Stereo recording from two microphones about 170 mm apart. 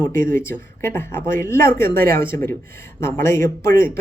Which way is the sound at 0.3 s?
15° left (ahead or behind).